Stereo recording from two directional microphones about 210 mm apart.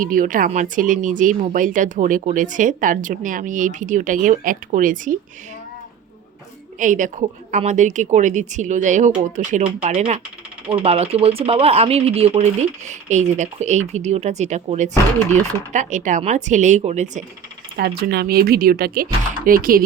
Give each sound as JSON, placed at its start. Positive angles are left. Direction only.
{"t": 0.0, "sound": "speech", "side_deg": -40}
{"t": 6.7, "sound": "speech", "side_deg": -40}
{"t": 17.7, "sound": "speech", "side_deg": -50}